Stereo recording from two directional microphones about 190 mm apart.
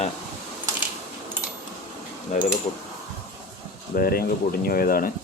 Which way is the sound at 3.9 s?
50° left (ahead or behind).